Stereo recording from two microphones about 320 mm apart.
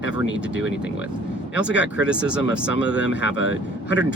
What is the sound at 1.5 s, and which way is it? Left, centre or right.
Speech, left.